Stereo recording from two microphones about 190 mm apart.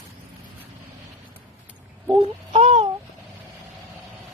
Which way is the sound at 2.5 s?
30° right (ahead or behind).